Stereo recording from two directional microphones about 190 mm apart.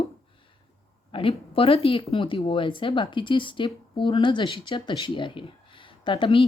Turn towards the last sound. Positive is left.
turn(degrees=25)  # may be behind; listen again after turning